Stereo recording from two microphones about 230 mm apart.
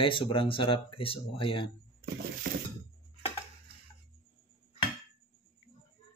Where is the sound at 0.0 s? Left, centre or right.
Left.